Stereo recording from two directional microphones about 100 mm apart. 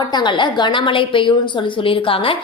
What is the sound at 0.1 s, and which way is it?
A woman's voice, 50° left (ahead or behind).